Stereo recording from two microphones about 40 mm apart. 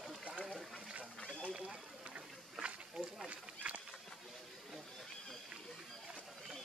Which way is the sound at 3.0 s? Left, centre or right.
Centre.